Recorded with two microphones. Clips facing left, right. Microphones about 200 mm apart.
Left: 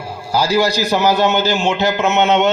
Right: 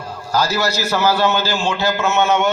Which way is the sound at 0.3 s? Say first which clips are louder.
Left 4 dB; 15° left (ahead or behind).